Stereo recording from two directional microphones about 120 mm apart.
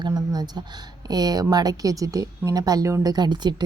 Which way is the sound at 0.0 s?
35° right (ahead or behind).